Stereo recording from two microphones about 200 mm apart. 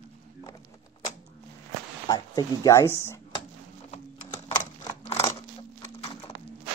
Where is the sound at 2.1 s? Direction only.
15° left (ahead or behind).